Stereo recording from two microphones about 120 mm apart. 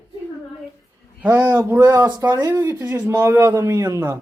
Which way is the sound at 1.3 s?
25° right (ahead or behind).